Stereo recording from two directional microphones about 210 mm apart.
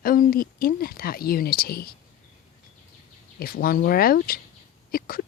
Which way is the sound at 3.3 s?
45° left (ahead or behind).